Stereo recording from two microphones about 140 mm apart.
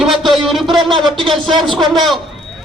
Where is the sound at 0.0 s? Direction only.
Centre (ahead or behind).